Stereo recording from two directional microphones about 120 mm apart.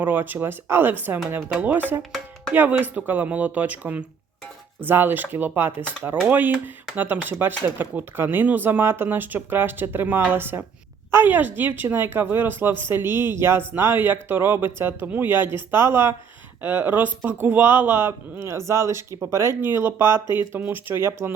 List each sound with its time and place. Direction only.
0.0 s speech: 15° right (ahead or behind)
2.0 s speech: centre (ahead or behind)
2.5 s speech: 15° right (ahead or behind)